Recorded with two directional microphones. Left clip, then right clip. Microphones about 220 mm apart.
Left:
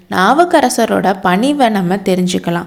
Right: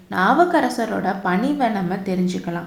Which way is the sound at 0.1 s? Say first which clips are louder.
Left 6 dB; 30° left (ahead or behind).